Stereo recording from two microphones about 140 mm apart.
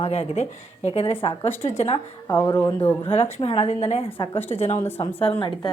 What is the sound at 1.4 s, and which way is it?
Speech, 20° left (ahead or behind).